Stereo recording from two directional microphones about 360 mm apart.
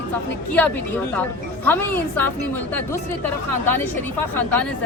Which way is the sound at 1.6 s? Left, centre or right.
Centre.